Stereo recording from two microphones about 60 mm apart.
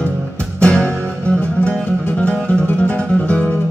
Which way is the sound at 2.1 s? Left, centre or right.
Centre.